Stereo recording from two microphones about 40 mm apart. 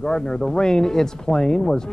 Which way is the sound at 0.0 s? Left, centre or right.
Centre.